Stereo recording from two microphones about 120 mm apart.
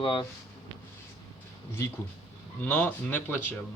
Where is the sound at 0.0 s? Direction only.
45° left (ahead or behind).